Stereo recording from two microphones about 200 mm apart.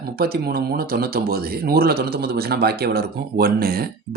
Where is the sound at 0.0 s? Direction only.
50° right (ahead or behind).